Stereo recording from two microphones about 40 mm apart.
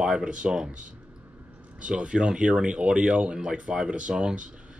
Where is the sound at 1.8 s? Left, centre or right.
Right.